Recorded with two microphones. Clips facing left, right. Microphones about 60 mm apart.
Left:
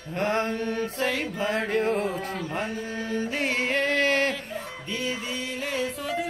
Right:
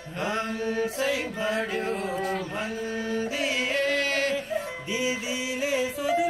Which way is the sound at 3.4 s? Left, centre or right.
Left.